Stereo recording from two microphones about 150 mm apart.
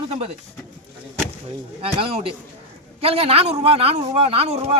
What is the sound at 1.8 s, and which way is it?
Speech, 40° right (ahead or behind).